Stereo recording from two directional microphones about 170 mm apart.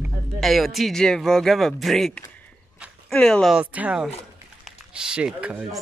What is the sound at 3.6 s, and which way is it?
Speech, 10° right (ahead or behind).